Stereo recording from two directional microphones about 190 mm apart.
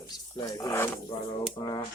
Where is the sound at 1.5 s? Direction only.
25° left (ahead or behind).